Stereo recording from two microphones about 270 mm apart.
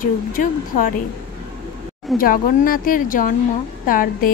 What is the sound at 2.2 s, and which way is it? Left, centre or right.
A woman's voice, left.